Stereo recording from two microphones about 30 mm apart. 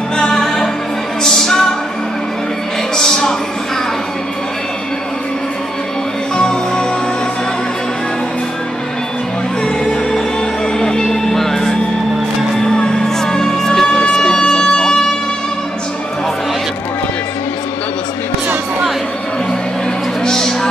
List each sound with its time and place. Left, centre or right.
0.2 s music: centre
3.0 s a sound: centre
6.3 s music: left
10.8 s music: left
13.2 s music: left
13.8 s wind instrument: left
20.2 s a sound: centre